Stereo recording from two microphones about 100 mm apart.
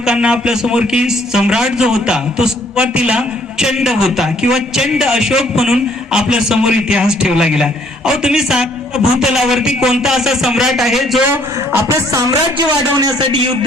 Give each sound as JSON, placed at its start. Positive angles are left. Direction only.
{"t": 0.0, "sound": "a man's voice", "side_deg": -10}
{"t": 11.7, "sound": "a man's voice", "side_deg": -30}